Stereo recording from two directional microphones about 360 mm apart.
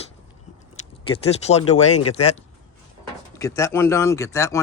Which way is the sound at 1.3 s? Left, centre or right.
Centre.